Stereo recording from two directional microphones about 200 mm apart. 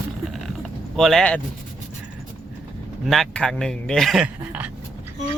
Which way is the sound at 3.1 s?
Centre (ahead or behind).